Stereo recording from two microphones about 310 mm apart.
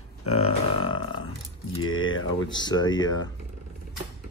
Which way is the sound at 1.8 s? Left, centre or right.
Left.